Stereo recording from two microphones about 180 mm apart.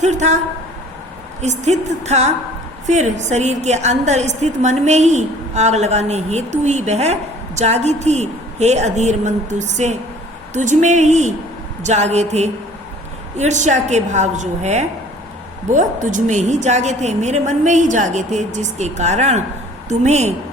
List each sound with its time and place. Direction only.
0.0 s a woman's voice: 40° right (ahead or behind)
1.4 s a woman's voice: 40° right (ahead or behind)